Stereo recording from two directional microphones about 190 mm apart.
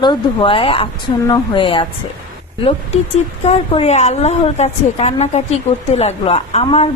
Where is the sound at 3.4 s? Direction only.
35° left (ahead or behind).